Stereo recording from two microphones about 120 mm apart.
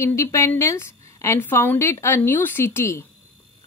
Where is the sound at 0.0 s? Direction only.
25° left (ahead or behind).